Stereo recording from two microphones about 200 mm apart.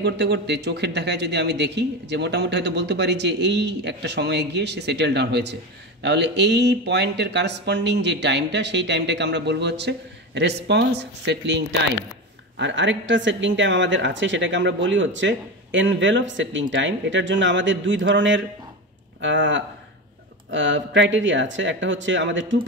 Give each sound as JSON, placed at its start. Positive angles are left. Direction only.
{"t": 0.0, "sound": "speech", "side_deg": -60}